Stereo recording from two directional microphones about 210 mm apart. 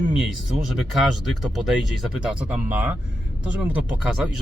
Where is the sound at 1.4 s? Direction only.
Centre (ahead or behind).